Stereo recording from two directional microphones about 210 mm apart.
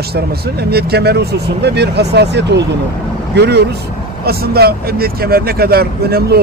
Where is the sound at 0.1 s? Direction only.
50° right (ahead or behind).